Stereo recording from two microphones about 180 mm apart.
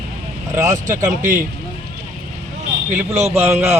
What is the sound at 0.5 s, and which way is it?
Speech, 20° right (ahead or behind).